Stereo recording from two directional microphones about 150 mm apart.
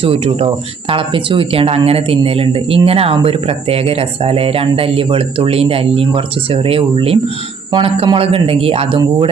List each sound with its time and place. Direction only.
0.0 s speech: 40° right (ahead or behind)
9.0 s speech: 30° right (ahead or behind)